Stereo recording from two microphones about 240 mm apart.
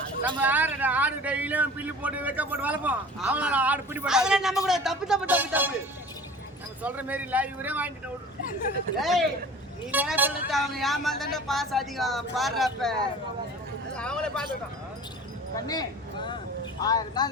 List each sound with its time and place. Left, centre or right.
0.4 s a man's voice: centre
6.8 s a man's voice: centre
9.0 s speech: centre
15.6 s a sound: centre
16.8 s speech: centre